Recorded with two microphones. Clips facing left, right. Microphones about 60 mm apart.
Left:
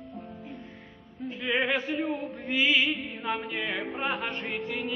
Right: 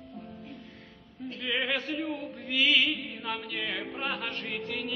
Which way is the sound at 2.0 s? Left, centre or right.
Centre.